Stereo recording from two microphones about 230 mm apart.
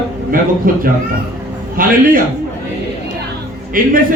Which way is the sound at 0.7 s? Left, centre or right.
Right.